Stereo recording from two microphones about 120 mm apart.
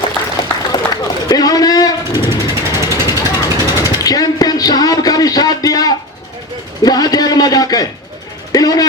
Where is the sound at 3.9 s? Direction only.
30° left (ahead or behind).